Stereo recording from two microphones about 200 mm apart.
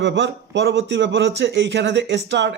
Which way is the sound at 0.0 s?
60° right (ahead or behind).